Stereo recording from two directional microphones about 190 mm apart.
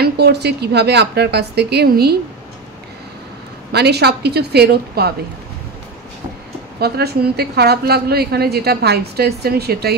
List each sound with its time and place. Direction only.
0.0 s a woman's voice: 60° right (ahead or behind)
3.7 s a woman's voice: 60° right (ahead or behind)
6.8 s a woman's voice: 55° right (ahead or behind)